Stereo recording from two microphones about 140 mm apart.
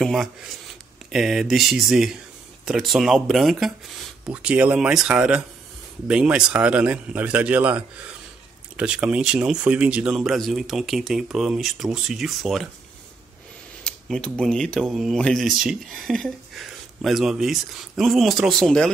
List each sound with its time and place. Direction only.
0.0 s speech: centre (ahead or behind)
13.8 s speech: 5° left (ahead or behind)